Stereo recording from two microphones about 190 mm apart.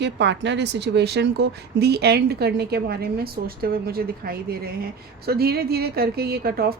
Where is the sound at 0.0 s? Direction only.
65° right (ahead or behind).